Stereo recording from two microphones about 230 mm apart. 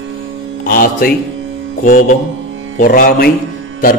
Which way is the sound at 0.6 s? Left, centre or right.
Left.